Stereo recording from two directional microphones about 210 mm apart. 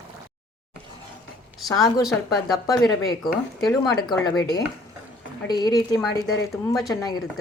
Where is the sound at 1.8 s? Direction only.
Centre (ahead or behind).